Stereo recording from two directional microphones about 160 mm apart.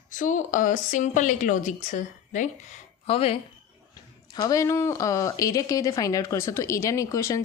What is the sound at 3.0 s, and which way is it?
Speech, 35° left (ahead or behind).